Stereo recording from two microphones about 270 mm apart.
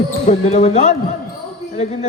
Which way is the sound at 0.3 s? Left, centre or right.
Left.